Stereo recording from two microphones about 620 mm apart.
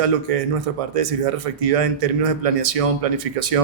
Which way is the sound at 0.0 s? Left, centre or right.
Right.